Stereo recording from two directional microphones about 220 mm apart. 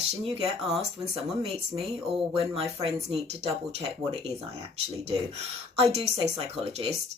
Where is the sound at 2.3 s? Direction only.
25° right (ahead or behind).